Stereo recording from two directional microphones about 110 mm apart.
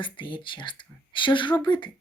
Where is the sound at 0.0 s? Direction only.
45° left (ahead or behind).